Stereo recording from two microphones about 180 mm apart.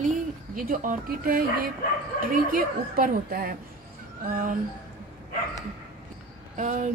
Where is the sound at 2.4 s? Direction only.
50° right (ahead or behind).